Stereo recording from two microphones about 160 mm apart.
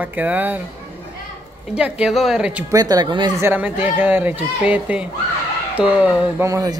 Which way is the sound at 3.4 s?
10° right (ahead or behind).